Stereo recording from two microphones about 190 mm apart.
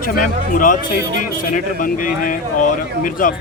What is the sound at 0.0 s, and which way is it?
Speech, 45° left (ahead or behind).